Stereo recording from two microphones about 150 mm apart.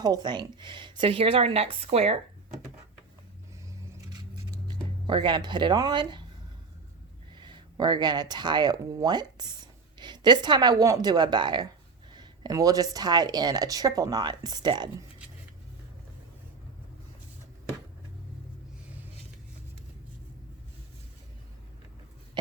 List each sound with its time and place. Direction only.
0.0 s speech: 30° right (ahead or behind)
3.7 s a sound: 25° right (ahead or behind)
7.3 s a woman's voice: 30° right (ahead or behind)